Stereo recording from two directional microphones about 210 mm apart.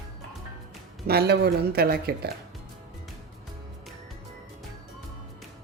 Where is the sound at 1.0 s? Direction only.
50° right (ahead or behind).